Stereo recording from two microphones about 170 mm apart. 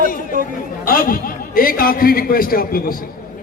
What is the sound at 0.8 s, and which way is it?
A man's voice, 55° left (ahead or behind).